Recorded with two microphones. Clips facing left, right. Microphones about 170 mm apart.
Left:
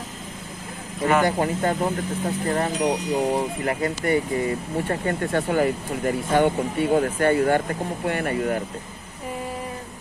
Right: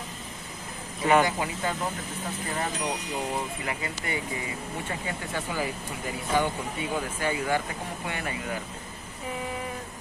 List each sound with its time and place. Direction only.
1.2 s speech: 50° left (ahead or behind)
2.8 s speech: 20° left (ahead or behind)
3.6 s speech: 45° left (ahead or behind)